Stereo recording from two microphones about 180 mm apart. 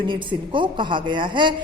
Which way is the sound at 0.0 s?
25° right (ahead or behind).